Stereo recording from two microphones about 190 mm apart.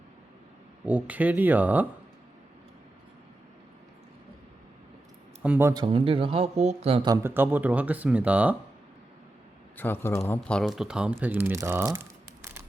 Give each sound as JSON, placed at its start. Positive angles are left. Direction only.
{"t": 0.9, "sound": "speech", "side_deg": -5}
{"t": 5.4, "sound": "speech", "side_deg": -10}
{"t": 5.8, "sound": "speech", "side_deg": -30}
{"t": 7.1, "sound": "speech", "side_deg": -10}
{"t": 9.7, "sound": "speech", "side_deg": 10}